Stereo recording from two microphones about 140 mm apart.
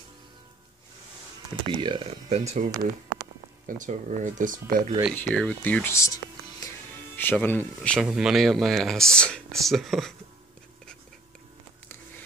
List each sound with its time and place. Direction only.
1.7 s speech: 35° right (ahead or behind)
2.2 s speech: 50° right (ahead or behind)
3.6 s speech: 65° right (ahead or behind); by 4.9 s 80° right
5.1 s speech: 10° left (ahead or behind)
8.0 s speech: 5° right (ahead or behind)